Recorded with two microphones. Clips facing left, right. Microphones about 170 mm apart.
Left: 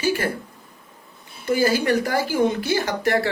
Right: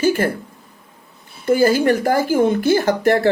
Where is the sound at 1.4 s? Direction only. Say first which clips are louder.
Right 5 dB; 50° right (ahead or behind).